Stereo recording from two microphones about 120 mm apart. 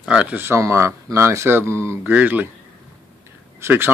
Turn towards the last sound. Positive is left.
turn(degrees=-20)  # may be behind; listen again after turning